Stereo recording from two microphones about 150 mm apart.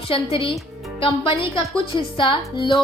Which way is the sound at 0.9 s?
35° left (ahead or behind).